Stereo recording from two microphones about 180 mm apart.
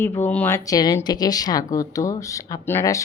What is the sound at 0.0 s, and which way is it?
Speech, 10° left (ahead or behind).